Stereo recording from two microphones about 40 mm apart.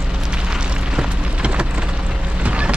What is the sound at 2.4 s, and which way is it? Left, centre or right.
Vehicle, right.